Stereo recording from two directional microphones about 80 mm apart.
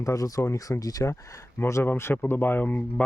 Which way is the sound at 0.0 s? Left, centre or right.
Left.